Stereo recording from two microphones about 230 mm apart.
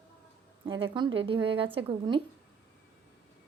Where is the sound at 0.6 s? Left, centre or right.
Right.